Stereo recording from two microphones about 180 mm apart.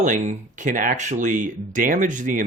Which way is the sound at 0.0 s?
45° right (ahead or behind).